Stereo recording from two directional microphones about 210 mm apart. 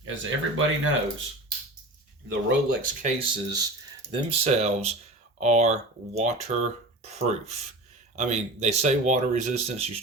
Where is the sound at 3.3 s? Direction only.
20° right (ahead or behind).